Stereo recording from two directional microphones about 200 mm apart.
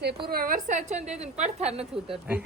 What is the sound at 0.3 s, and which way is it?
A woman's voice, 45° right (ahead or behind).